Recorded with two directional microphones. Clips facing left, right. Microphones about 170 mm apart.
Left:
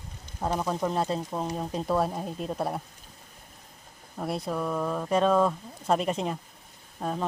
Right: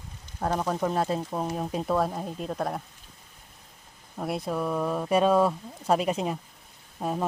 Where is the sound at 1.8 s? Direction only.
Centre (ahead or behind).